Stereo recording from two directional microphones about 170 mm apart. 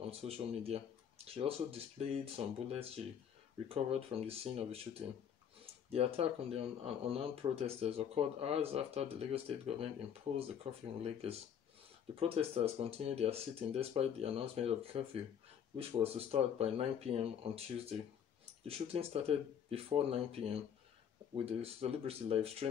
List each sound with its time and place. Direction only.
0.0 s speech: 35° right (ahead or behind)
5.9 s speech: 35° right (ahead or behind)